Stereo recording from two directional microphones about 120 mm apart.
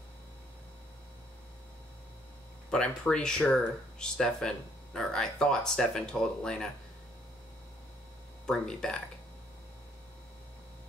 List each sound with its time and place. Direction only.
2.7 s speech: 5° left (ahead or behind)
8.5 s speech: 5° left (ahead or behind)